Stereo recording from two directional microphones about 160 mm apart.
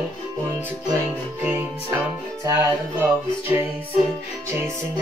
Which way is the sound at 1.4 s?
15° right (ahead or behind).